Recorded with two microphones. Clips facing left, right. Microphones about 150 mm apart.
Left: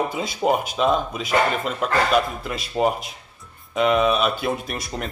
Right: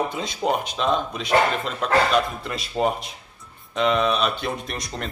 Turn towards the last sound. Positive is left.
turn(degrees=5)  # may be behind; listen again after turning